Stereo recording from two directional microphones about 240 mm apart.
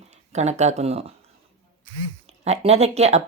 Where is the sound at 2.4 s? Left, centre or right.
Right.